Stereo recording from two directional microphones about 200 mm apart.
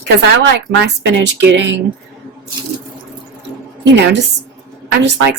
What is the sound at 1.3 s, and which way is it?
Speech, 60° right (ahead or behind).